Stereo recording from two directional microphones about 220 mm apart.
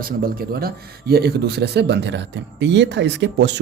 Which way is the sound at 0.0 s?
40° right (ahead or behind).